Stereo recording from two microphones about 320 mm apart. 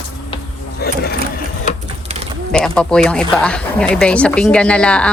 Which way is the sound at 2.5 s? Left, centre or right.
Centre.